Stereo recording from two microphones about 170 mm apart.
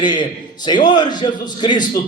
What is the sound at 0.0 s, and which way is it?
A man's voice, 25° left (ahead or behind).